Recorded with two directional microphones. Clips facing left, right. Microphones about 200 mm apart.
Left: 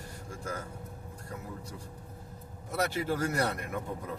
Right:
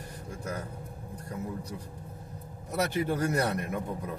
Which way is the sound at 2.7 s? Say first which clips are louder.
Right 2 dB; 20° right (ahead or behind).